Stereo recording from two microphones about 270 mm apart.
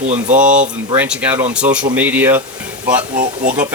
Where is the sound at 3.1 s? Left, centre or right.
Right.